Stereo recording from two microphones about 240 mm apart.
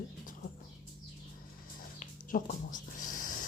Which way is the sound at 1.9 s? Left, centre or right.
Left.